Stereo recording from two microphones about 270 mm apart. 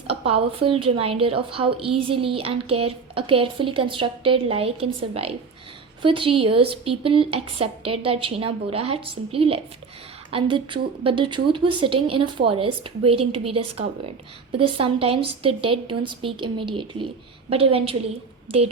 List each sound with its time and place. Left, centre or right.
0.1 s a woman's voice: right